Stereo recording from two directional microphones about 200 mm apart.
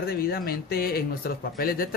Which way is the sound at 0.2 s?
50° left (ahead or behind).